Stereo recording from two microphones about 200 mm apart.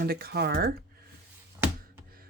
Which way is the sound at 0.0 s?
50° right (ahead or behind).